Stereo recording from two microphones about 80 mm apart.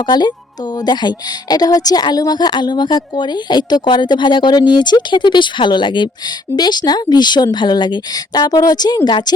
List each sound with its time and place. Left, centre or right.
0.0 s a woman's voice: left
6.6 s a woman's voice: left
9.0 s a woman's voice: left